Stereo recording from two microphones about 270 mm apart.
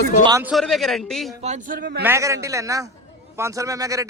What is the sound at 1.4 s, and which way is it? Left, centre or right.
Speech, right.